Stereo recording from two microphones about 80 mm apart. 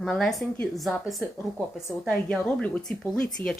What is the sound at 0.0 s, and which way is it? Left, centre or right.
Speech, centre.